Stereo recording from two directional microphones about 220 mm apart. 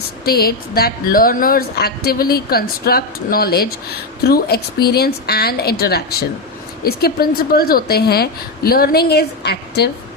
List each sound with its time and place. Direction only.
0.3 s a woman's voice: 45° left (ahead or behind)